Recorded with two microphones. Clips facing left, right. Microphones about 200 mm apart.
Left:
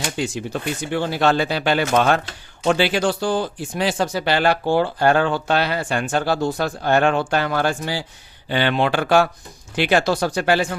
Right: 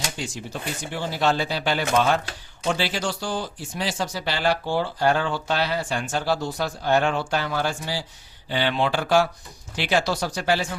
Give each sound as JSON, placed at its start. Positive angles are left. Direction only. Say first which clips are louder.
{"t": 0.0, "sound": "speech", "louder": "left 7 dB", "side_deg": 60}